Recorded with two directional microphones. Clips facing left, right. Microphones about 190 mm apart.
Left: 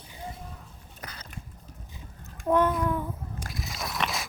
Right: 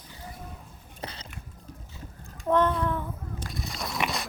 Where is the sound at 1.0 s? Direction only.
30° right (ahead or behind).